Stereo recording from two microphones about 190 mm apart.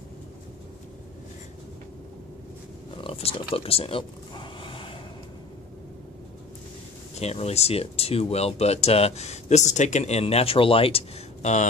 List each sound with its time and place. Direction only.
2.9 s pig: 30° left (ahead or behind)
3.5 s speech: 30° left (ahead or behind)
7.2 s speech: 35° left (ahead or behind)